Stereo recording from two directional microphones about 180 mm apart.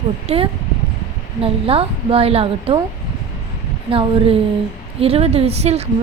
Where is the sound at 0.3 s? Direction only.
35° right (ahead or behind).